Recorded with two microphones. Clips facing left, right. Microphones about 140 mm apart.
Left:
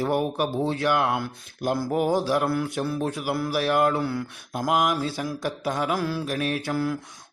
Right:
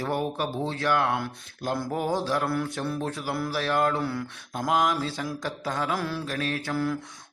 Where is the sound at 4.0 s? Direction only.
Centre (ahead or behind).